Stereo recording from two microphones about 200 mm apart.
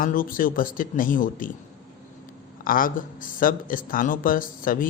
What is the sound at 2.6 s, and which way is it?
Speech, 45° left (ahead or behind).